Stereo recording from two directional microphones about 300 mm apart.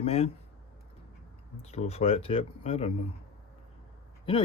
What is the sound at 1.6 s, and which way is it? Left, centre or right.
Speech, left.